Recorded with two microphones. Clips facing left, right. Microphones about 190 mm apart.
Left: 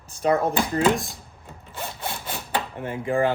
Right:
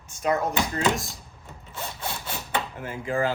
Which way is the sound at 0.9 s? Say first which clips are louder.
Left 4 dB; centre (ahead or behind).